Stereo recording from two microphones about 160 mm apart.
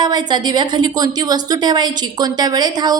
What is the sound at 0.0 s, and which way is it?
Speech, 25° right (ahead or behind).